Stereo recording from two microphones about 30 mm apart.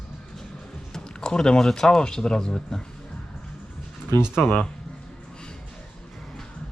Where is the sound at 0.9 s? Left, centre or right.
Left.